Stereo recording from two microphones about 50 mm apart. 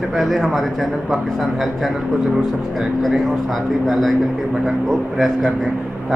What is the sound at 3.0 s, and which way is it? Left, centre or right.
A man's voice, centre.